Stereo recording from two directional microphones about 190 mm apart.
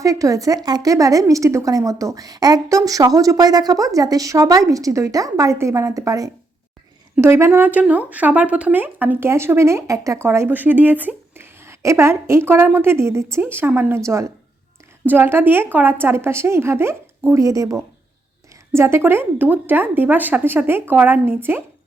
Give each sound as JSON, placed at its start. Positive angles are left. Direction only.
{"t": 0.0, "sound": "a woman's voice", "side_deg": -15}